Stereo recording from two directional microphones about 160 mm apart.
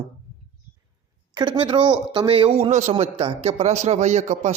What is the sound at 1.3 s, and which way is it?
A man's voice, 30° right (ahead or behind).